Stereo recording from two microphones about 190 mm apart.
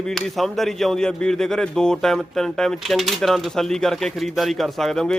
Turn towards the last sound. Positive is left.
turn(degrees=0)  # may be behind; listen again after turning